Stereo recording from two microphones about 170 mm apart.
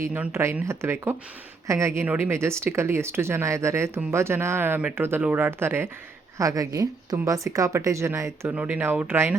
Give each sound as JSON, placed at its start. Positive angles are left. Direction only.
{"t": 0.0, "sound": "speech", "side_deg": -15}